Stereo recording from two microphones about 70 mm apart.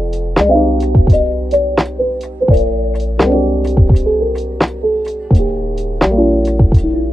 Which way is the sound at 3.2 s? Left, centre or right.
Centre.